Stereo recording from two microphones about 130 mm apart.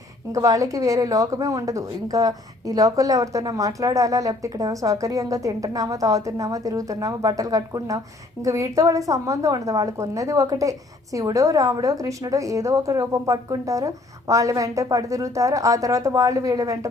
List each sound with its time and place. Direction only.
0.3 s a woman's voice: 25° right (ahead or behind)